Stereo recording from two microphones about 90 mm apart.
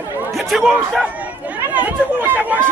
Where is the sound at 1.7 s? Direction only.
15° right (ahead or behind).